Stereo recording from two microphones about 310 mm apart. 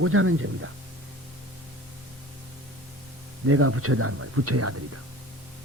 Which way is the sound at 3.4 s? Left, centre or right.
Right.